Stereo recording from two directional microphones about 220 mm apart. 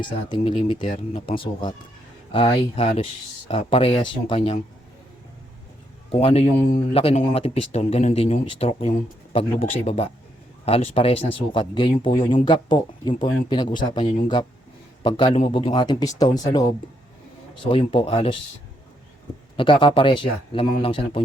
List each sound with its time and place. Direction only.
0.0 s speech: 20° left (ahead or behind)
6.1 s speech: 25° left (ahead or behind)
17.6 s speech: 25° left (ahead or behind)
19.5 s speech: 25° left (ahead or behind)